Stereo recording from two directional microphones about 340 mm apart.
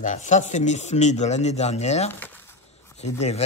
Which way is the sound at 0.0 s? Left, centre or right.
Left.